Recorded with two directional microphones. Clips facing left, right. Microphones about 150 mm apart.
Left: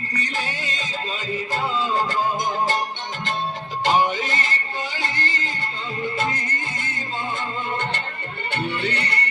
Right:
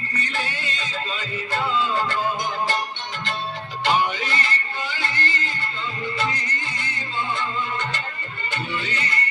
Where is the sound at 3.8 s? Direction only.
40° left (ahead or behind).